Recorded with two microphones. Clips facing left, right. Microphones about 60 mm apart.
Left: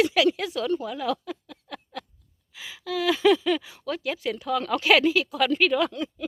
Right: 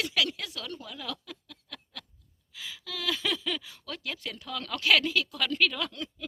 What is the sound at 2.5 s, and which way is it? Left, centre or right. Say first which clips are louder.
Speech: left 9 dB; left.